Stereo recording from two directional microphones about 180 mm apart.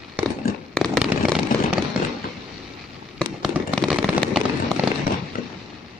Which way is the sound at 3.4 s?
5° right (ahead or behind).